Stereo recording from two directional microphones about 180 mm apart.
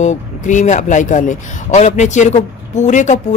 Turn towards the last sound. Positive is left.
turn(degrees=45)  # may be behind; listen again after turning